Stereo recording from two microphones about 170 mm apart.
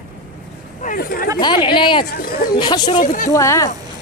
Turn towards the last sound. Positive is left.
turn(degrees=15)  # may be behind; listen again after turning